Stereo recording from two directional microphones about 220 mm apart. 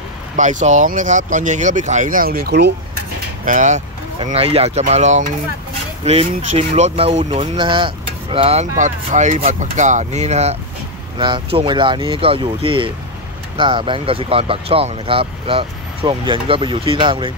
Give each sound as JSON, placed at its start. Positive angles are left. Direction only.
{"t": 0.4, "sound": "speech", "side_deg": -35}
{"t": 3.4, "sound": "speech", "side_deg": -35}